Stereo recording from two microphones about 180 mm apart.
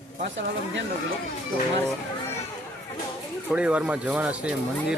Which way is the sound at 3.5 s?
5° right (ahead or behind).